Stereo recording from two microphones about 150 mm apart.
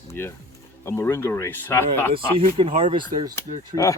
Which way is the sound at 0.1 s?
15° left (ahead or behind).